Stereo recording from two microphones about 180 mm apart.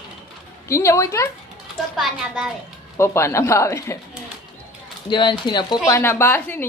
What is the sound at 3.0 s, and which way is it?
Speech, 15° left (ahead or behind).